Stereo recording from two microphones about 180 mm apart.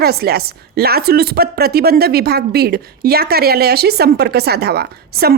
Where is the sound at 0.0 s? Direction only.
60° right (ahead or behind).